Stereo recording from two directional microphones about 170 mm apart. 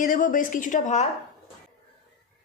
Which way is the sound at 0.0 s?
55° left (ahead or behind).